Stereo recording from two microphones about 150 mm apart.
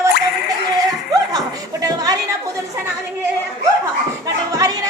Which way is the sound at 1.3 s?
25° right (ahead or behind).